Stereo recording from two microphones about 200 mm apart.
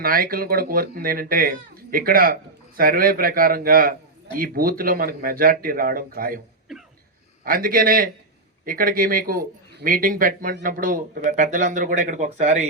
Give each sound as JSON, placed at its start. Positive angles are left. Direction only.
{"t": 0.0, "sound": "speech", "side_deg": -45}
{"t": 7.4, "sound": "speech", "side_deg": -45}